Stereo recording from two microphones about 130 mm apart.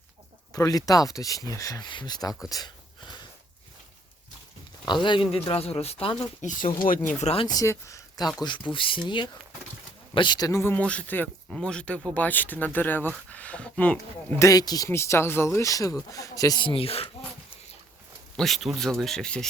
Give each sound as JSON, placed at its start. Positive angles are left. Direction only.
{"t": 0.5, "sound": "speech", "side_deg": 30}
{"t": 2.5, "sound": "a sound", "side_deg": 30}
{"t": 5.0, "sound": "speech", "side_deg": 40}
{"t": 6.4, "sound": "speech", "side_deg": 80}
{"t": 7.4, "sound": "speech", "side_deg": 25}
{"t": 8.4, "sound": "speech", "side_deg": 35}
{"t": 14.4, "sound": "speech", "side_deg": 30}
{"t": 16.6, "sound": "speech", "side_deg": 45}
{"t": 18.3, "sound": "speech", "side_deg": 0}